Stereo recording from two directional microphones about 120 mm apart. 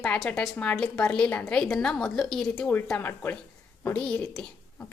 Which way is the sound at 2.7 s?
15° left (ahead or behind).